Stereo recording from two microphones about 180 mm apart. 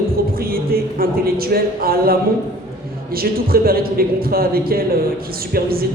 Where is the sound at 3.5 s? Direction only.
55° right (ahead or behind).